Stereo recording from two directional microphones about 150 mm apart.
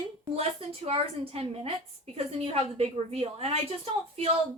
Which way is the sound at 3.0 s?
45° right (ahead or behind).